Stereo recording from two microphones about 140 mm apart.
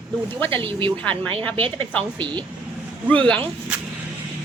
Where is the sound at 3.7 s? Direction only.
10° right (ahead or behind).